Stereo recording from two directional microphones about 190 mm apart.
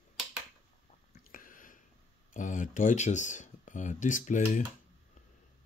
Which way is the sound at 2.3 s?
40° left (ahead or behind).